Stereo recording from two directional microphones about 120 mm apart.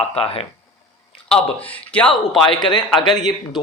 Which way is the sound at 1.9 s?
10° left (ahead or behind).